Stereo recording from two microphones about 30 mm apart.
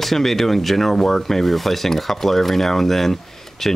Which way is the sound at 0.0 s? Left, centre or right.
Centre.